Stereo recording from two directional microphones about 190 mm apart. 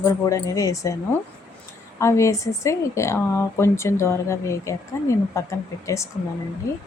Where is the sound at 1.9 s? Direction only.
15° left (ahead or behind).